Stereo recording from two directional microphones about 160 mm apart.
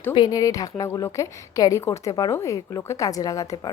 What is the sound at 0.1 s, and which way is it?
A woman's voice, 25° left (ahead or behind).